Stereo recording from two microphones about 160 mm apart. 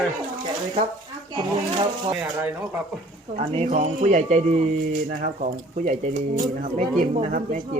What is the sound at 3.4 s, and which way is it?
Speech, 40° right (ahead or behind).